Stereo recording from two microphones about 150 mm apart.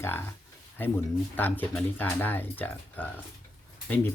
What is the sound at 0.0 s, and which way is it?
Speech, 15° left (ahead or behind).